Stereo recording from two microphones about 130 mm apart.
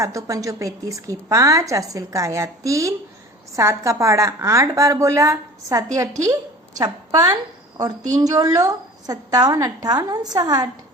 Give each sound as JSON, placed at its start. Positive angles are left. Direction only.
{"t": 0.0, "sound": "a woman's voice", "side_deg": -25}